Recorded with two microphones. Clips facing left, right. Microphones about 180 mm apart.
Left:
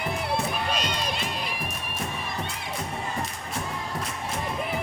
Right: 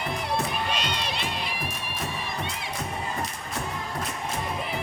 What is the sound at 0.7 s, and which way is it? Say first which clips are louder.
Crowd: left 1 dB; 45° left (ahead or behind).